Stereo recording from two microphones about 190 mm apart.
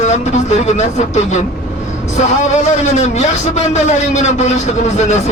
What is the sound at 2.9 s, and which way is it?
A man's voice, 35° left (ahead or behind).